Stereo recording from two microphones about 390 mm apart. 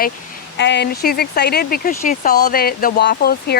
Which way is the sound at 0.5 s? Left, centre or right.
Left.